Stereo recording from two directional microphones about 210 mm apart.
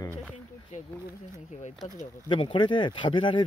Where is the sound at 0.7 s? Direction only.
35° left (ahead or behind).